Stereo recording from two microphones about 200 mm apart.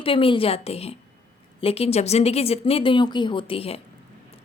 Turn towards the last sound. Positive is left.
turn(degrees=30)  # may be behind; listen again after turning